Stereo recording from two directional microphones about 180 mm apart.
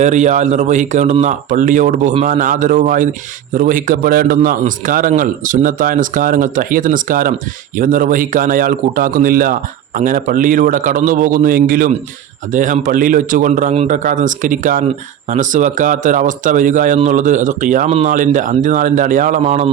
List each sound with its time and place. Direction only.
0.0 s speech: 40° right (ahead or behind)